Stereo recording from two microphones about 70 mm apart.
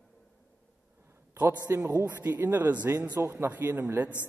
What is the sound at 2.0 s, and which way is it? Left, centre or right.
Speech, right.